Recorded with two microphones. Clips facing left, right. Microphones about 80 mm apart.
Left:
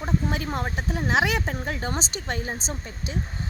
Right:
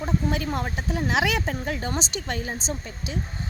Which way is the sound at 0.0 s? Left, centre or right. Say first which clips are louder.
Right 1 dB; left.